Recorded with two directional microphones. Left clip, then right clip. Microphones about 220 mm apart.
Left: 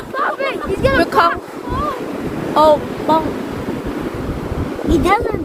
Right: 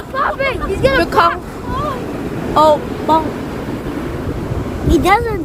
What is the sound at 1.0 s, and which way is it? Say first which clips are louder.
Speech: even; 5° right (ahead or behind).